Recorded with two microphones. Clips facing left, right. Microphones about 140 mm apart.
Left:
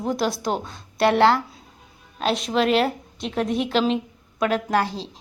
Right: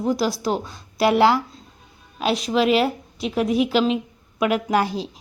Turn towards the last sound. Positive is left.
turn(degrees=-15)  # may be behind; listen again after turning